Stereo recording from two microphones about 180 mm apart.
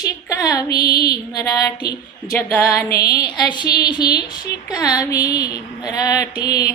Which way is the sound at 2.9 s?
60° left (ahead or behind).